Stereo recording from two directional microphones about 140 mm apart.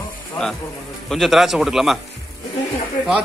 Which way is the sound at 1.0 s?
Centre (ahead or behind).